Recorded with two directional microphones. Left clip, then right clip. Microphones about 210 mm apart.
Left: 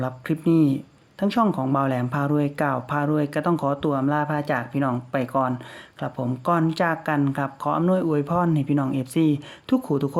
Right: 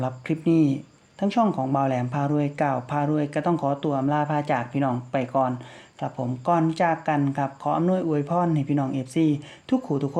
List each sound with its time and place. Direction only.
0.0 s speech: 20° left (ahead or behind)